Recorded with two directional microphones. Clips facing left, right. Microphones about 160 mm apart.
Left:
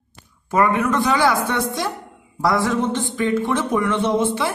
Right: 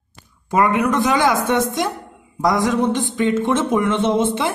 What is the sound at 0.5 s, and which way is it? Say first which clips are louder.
A woman's voice: right 1 dB; 20° right (ahead or behind).